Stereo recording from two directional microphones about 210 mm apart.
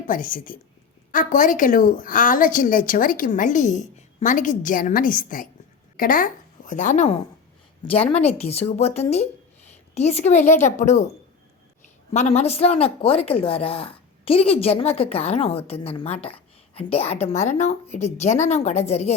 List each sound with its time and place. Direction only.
0.1 s a woman's voice: 40° left (ahead or behind)
8.4 s a woman's voice: 30° left (ahead or behind)
12.1 s a woman's voice: 30° left (ahead or behind)